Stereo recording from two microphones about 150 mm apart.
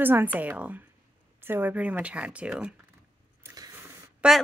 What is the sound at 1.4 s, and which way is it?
Speech, 15° right (ahead or behind).